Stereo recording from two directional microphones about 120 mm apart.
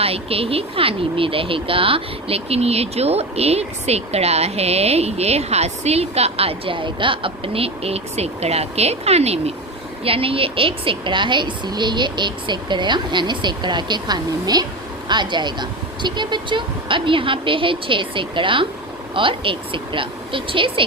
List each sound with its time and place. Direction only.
0.0 s a woman's voice: 55° right (ahead or behind)